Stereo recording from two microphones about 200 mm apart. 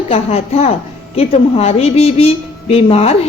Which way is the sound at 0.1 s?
30° left (ahead or behind).